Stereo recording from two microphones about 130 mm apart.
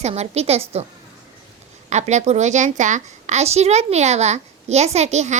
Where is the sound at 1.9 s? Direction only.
60° right (ahead or behind).